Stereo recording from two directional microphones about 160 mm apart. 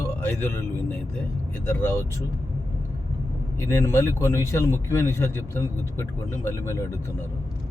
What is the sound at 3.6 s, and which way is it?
A man's voice, 15° left (ahead or behind).